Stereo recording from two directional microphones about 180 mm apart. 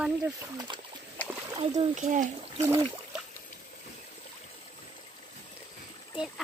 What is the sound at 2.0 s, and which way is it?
Speech, 45° right (ahead or behind).